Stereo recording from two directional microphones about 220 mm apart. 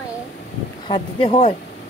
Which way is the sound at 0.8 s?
25° left (ahead or behind).